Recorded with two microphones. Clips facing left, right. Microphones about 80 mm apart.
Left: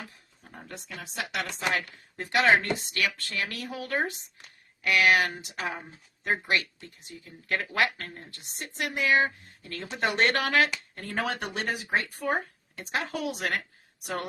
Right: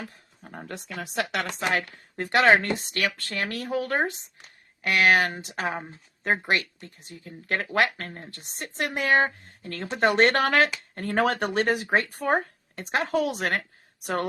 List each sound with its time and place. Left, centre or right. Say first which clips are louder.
0.4 s speech: right 6 dB; right
1.4 s speech: right 1 dB; right